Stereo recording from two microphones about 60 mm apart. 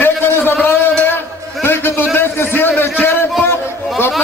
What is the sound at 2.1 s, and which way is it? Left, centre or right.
A man's voice, left.